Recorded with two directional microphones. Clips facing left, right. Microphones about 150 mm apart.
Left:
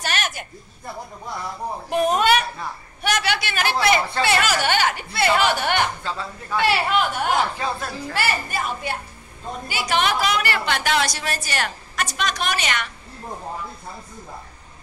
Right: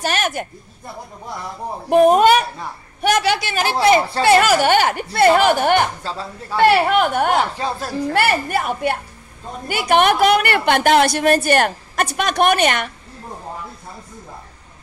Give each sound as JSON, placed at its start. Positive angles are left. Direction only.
{"t": 0.0, "sound": "speech", "side_deg": -45}
{"t": 1.9, "sound": "speech", "side_deg": -50}
{"t": 6.6, "sound": "speech", "side_deg": -55}
{"t": 7.5, "sound": "speech", "side_deg": -35}
{"t": 7.9, "sound": "a woman's voice", "side_deg": -55}